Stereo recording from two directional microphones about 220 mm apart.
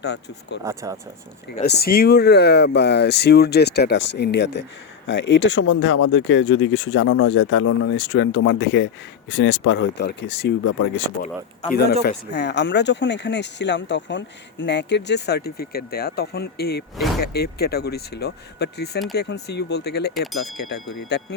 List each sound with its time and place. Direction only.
0.0 s speech: 50° left (ahead or behind)
0.6 s speech: 15° right (ahead or behind)
1.6 s speech: 45° left (ahead or behind)
11.7 s speech: 45° left (ahead or behind)
20.1 s speech: centre (ahead or behind)